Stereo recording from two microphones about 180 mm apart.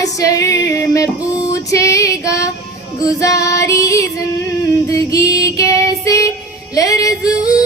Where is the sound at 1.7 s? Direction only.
15° left (ahead or behind).